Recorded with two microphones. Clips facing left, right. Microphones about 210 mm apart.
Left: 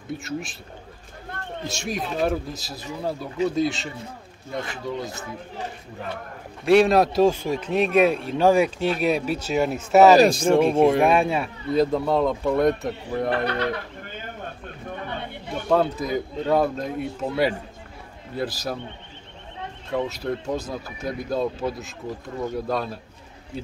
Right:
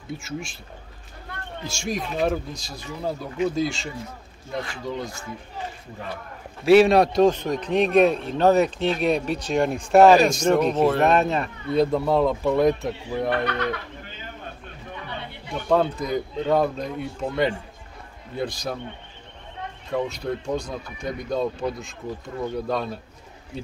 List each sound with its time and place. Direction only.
0.1 s speech: centre (ahead or behind)
1.7 s speech: centre (ahead or behind)
6.6 s speech: centre (ahead or behind)
10.1 s speech: 35° left (ahead or behind)
10.6 s speech: 10° left (ahead or behind)
15.0 s a sound: 50° left (ahead or behind)
15.7 s speech: centre (ahead or behind)
19.9 s speech: 5° left (ahead or behind)